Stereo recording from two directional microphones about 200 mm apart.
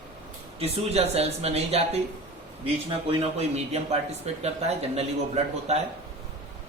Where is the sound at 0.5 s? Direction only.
30° right (ahead or behind).